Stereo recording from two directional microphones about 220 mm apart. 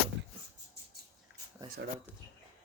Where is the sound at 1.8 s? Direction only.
55° right (ahead or behind).